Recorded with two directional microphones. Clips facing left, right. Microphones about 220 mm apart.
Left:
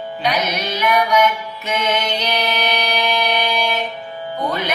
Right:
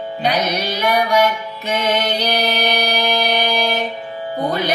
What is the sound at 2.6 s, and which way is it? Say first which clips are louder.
Music: right 2 dB; 50° right (ahead or behind).